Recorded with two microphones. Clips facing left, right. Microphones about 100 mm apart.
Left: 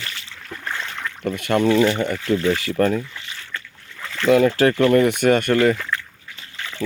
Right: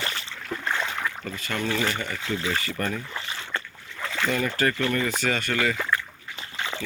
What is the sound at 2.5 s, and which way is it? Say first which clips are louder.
Speech: left 9 dB; 85° left.